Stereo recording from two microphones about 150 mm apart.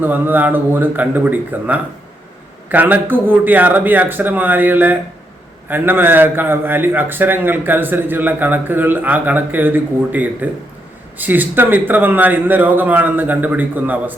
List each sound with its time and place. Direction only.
0.0 s a man's voice: 10° right (ahead or behind)